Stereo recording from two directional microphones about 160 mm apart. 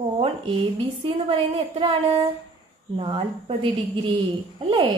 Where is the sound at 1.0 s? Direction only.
35° right (ahead or behind).